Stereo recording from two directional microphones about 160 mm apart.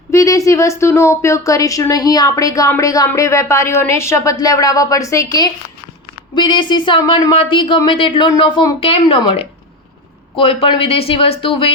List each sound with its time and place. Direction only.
0.1 s speech: 20° left (ahead or behind)